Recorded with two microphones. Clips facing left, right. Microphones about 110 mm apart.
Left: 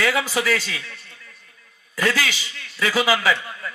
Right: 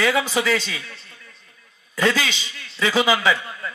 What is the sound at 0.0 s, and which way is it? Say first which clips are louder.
A man's voice: right 1 dB; 20° right (ahead or behind).